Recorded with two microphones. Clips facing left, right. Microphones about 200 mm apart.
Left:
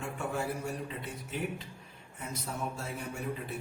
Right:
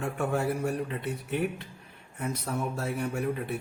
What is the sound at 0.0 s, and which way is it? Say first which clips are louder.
A man's voice: right 6 dB; 60° right (ahead or behind).